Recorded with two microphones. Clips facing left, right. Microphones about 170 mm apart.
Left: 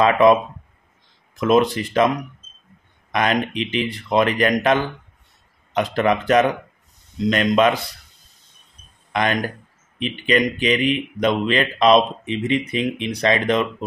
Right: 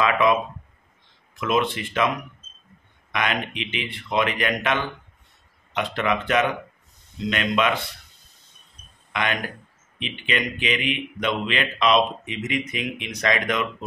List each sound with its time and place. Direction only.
0.0 s speech: 35° left (ahead or behind)
3.1 s speech: 35° left (ahead or behind)
9.1 s speech: 40° left (ahead or behind)